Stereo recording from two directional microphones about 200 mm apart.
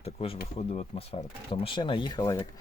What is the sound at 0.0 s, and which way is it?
Speech, 30° left (ahead or behind).